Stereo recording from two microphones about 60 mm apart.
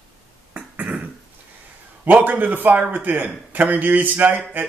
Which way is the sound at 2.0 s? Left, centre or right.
Right.